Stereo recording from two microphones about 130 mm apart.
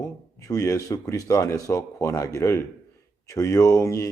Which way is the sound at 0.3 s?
25° left (ahead or behind).